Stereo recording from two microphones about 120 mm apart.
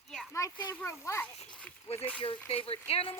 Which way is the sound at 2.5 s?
55° left (ahead or behind).